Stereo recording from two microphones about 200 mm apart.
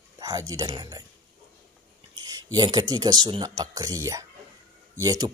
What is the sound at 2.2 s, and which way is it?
Speech, 20° right (ahead or behind).